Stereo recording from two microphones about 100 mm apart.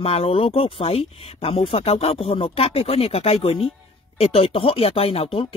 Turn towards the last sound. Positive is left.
turn(degrees=80)